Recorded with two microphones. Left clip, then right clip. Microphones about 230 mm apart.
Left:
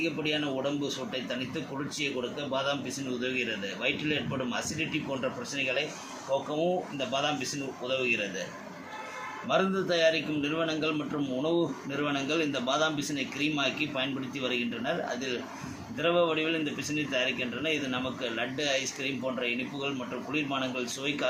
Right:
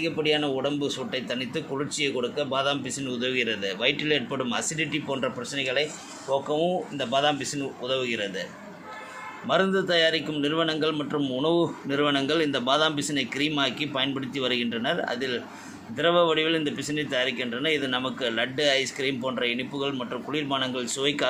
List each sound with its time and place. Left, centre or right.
0.0 s a man's voice: right
9.5 s a man's voice: right